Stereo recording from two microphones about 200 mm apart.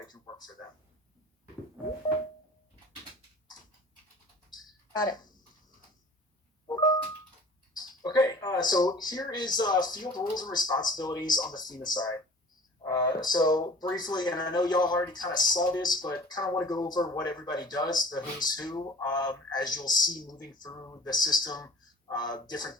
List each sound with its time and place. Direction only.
0.1 s speech: 20° left (ahead or behind)
4.9 s speech: 20° left (ahead or behind)
6.7 s a sound: 20° left (ahead or behind)
8.0 s speech: 20° left (ahead or behind)